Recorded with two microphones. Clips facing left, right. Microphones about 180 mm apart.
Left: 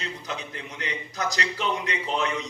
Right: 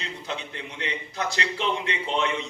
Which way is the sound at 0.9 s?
30° right (ahead or behind).